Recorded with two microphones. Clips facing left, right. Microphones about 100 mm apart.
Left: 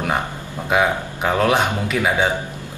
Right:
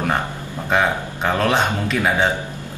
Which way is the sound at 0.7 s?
10° left (ahead or behind).